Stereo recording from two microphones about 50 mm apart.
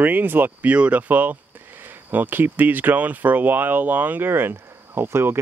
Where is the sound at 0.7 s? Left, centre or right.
Right.